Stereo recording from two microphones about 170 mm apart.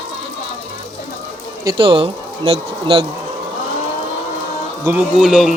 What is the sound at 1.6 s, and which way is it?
Speech, 30° right (ahead or behind).